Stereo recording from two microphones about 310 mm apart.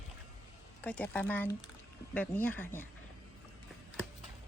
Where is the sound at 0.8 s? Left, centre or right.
Centre.